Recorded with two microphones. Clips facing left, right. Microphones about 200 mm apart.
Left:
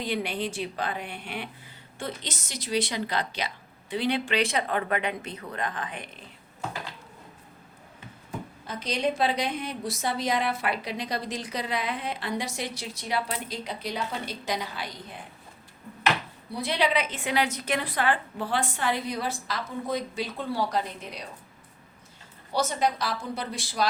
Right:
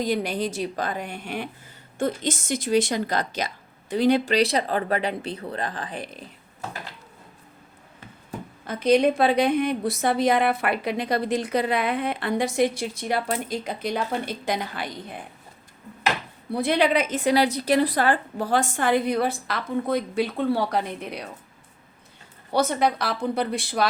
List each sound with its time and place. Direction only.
0.0 s a woman's voice: 40° right (ahead or behind)
8.6 s a woman's voice: 55° right (ahead or behind)
16.5 s a woman's voice: 55° right (ahead or behind)
22.5 s a woman's voice: 60° right (ahead or behind)